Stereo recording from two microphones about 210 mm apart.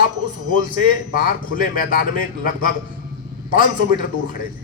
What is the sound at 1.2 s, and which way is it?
Speech, 40° left (ahead or behind).